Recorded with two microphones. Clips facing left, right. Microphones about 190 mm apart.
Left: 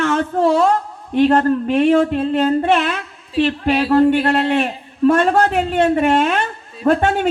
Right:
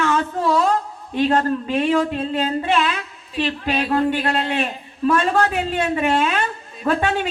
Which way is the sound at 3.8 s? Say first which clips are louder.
Left 7 dB; 35° left (ahead or behind).